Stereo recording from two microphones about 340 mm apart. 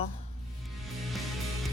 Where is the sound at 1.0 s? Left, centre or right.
Centre.